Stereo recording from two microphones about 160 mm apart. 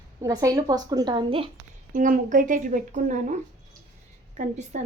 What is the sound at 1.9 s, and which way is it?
A woman's voice, 55° right (ahead or behind).